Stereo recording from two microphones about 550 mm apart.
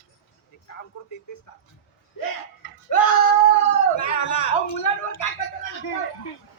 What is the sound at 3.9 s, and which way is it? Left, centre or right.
Speech, left.